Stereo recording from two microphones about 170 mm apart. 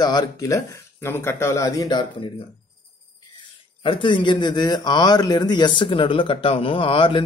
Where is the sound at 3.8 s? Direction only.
30° left (ahead or behind).